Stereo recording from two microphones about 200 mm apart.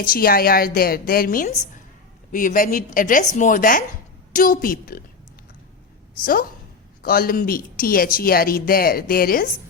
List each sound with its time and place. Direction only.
0.0 s speech: 45° left (ahead or behind)
7.0 s speech: 45° left (ahead or behind)